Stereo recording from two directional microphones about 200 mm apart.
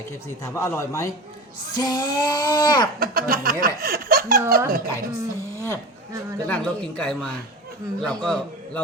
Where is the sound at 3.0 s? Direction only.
50° right (ahead or behind).